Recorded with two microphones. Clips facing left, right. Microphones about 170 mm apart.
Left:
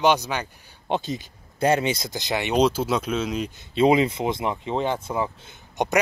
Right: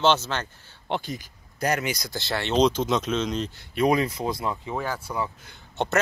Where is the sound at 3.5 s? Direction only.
25° left (ahead or behind).